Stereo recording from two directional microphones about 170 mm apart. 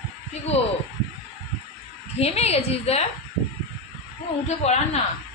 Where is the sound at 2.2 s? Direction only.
40° left (ahead or behind).